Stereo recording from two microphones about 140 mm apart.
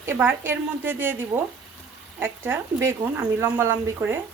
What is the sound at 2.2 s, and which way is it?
Speech, 15° right (ahead or behind).